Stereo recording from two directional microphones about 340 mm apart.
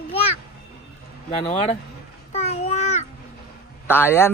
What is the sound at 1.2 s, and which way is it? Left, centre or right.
Speech, centre.